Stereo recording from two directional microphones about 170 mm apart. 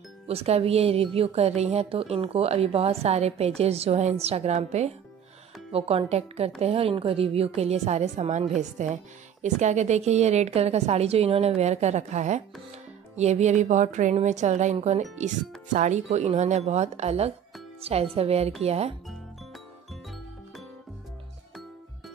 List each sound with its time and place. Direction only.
0.3 s speech: 35° right (ahead or behind)